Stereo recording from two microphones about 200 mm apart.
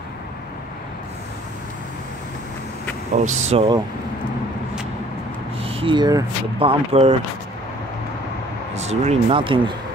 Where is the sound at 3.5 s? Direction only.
25° right (ahead or behind).